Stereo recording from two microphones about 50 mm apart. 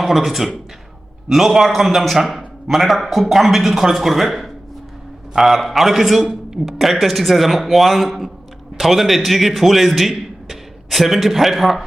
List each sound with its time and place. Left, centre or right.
0.0 s a man's voice: centre